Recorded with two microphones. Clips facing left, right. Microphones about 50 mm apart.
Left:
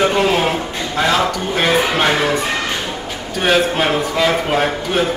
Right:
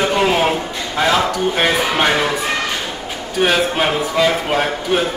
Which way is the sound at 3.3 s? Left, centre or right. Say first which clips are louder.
Left 1 dB; centre.